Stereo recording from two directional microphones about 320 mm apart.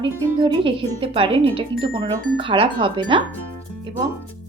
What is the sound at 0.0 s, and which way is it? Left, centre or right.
Speech, centre.